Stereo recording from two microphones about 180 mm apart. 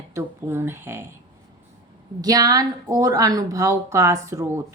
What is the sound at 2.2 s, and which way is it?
Speech, 20° right (ahead or behind).